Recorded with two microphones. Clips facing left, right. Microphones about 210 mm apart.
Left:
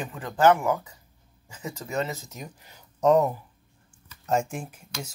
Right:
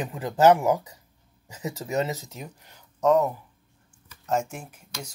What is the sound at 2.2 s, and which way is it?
Speech, 10° right (ahead or behind).